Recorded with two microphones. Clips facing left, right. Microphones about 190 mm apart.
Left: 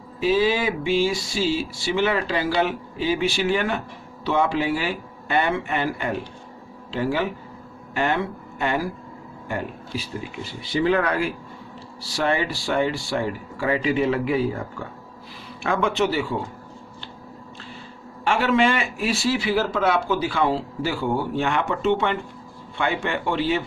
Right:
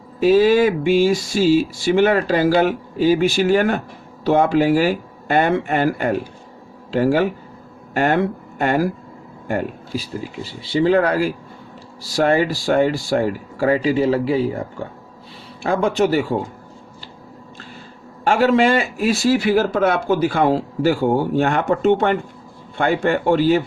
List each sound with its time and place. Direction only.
0.2 s speech: 45° right (ahead or behind)
10.6 s speech: 30° right (ahead or behind)
15.6 s speech: 35° right (ahead or behind)
18.3 s speech: 40° right (ahead or behind)